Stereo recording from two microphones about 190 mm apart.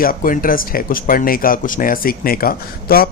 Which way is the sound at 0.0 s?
45° left (ahead or behind).